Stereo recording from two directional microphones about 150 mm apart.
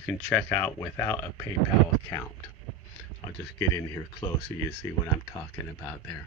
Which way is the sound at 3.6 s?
20° left (ahead or behind).